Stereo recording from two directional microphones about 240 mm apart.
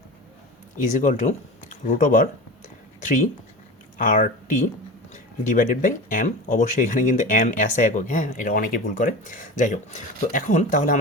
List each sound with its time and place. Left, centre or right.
0.8 s speech: left